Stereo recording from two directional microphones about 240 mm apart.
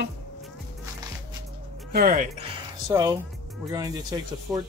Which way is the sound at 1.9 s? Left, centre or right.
Right.